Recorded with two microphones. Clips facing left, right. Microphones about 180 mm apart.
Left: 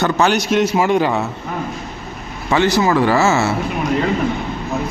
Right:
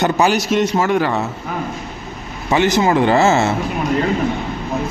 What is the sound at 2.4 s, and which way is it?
Speech, 20° right (ahead or behind).